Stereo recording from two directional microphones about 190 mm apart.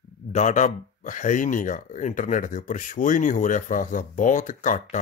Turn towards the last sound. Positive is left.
turn(degrees=40)  # may be behind; listen again after turning